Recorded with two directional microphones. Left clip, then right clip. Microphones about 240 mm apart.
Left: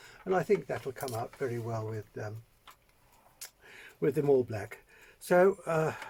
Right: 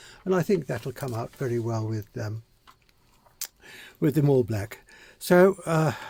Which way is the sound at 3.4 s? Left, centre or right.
Right.